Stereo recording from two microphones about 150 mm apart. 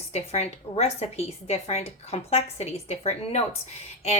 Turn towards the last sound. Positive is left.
turn(degrees=45)  # may be behind; listen again after turning